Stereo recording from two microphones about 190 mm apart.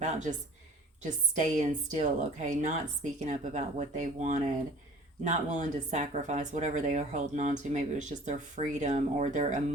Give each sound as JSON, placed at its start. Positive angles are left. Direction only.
{"t": 0.0, "sound": "speech", "side_deg": -40}
{"t": 1.4, "sound": "speech", "side_deg": -40}